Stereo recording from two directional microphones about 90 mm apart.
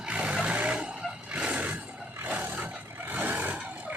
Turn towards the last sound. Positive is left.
turn(degrees=-20)  # may be behind; listen again after turning